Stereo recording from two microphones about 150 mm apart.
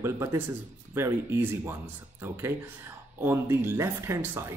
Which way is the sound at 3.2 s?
15° right (ahead or behind).